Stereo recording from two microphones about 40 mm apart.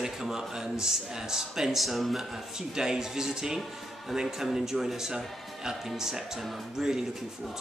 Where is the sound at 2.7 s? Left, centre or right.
Centre.